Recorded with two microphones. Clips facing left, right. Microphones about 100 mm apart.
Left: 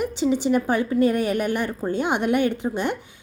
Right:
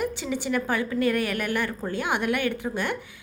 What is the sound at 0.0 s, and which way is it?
A woman's voice, 20° left (ahead or behind).